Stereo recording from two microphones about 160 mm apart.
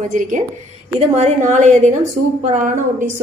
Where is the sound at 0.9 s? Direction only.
45° right (ahead or behind).